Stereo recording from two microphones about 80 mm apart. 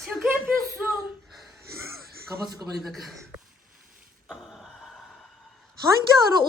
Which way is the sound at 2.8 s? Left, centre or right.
Centre.